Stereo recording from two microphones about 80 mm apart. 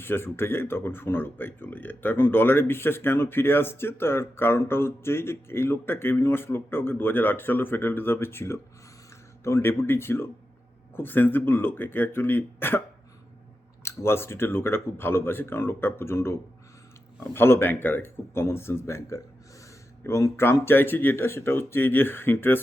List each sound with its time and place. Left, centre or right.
0.0 s speech: left
13.8 s speech: left